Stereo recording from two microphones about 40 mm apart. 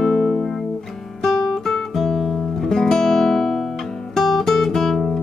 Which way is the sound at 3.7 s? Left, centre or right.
Centre.